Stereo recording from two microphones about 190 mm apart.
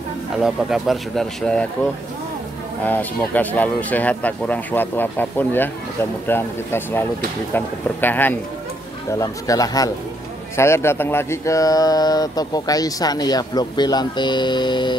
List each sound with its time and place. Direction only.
0.4 s speech: centre (ahead or behind); by 15.0 s 25° left (ahead or behind)